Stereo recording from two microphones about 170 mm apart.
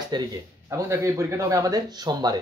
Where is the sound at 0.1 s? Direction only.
25° right (ahead or behind).